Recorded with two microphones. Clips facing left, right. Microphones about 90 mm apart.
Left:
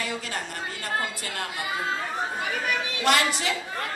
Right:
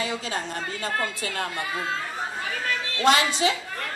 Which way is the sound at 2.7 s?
15° left (ahead or behind).